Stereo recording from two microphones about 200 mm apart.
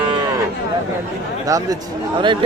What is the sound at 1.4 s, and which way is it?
Speech, 15° right (ahead or behind).